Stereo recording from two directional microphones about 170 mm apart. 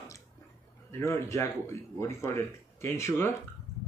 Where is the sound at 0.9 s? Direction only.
15° left (ahead or behind).